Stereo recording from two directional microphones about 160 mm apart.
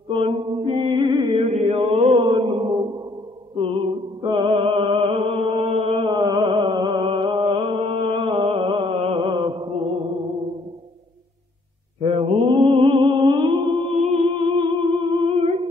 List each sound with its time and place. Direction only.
0.1 s mantra: 35° right (ahead or behind)
4.2 s music: 30° right (ahead or behind)
12.0 s music: 35° right (ahead or behind)